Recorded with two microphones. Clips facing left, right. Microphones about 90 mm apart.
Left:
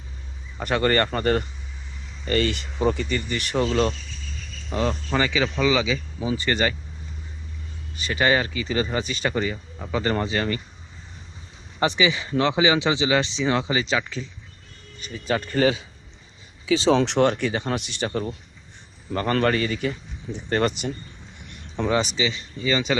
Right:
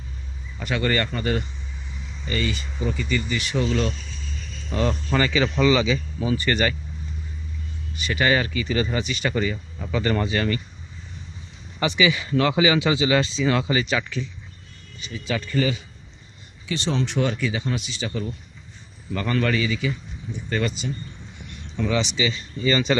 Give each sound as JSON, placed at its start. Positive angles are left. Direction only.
{"t": 0.6, "sound": "speech", "side_deg": 40}
{"t": 2.2, "sound": "speech", "side_deg": 60}
{"t": 4.7, "sound": "speech", "side_deg": 20}
{"t": 6.1, "sound": "speech", "side_deg": 20}
{"t": 7.9, "sound": "speech", "side_deg": 30}
{"t": 11.8, "sound": "speech", "side_deg": 30}
{"t": 15.0, "sound": "speech", "side_deg": 45}
{"t": 16.6, "sound": "speech", "side_deg": 85}
{"t": 17.4, "sound": "speech", "side_deg": 50}
{"t": 19.1, "sound": "speech", "side_deg": 40}
{"t": 21.8, "sound": "speech", "side_deg": 45}
{"t": 22.6, "sound": "speech", "side_deg": 10}